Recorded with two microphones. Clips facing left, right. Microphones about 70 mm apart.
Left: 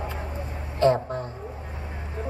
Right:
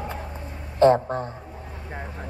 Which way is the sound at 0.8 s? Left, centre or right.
Right.